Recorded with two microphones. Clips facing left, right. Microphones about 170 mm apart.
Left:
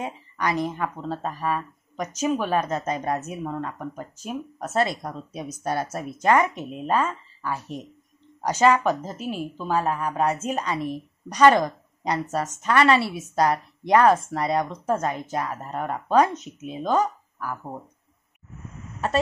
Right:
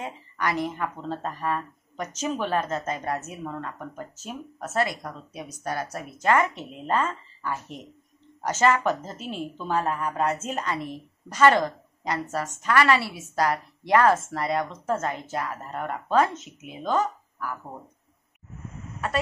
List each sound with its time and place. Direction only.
0.0 s speech: 15° left (ahead or behind)